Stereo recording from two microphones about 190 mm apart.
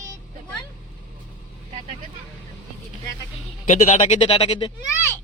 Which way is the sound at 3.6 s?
40° left (ahead or behind).